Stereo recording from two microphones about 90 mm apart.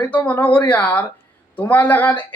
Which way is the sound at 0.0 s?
20° left (ahead or behind).